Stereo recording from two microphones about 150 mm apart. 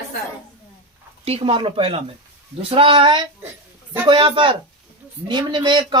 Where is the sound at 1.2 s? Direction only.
40° right (ahead or behind).